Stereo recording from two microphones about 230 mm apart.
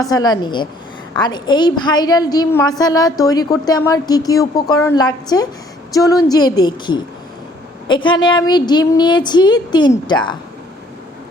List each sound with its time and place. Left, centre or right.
0.0 s a woman's voice: centre